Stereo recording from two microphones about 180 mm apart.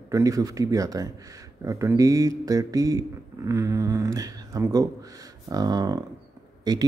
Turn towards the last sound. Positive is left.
turn(degrees=-20)  # may be behind; listen again after turning